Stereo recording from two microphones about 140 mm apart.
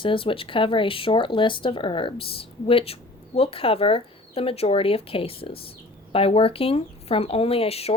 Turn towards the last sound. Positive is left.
turn(degrees=45)  # may be behind; listen again after turning